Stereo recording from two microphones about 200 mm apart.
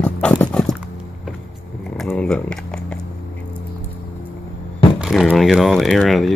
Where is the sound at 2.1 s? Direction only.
5° left (ahead or behind).